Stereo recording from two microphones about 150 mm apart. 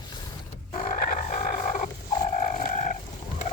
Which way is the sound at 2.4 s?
60° left (ahead or behind).